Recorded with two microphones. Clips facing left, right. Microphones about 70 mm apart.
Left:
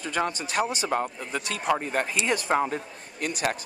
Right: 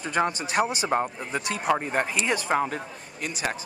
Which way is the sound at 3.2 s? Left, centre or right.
Left.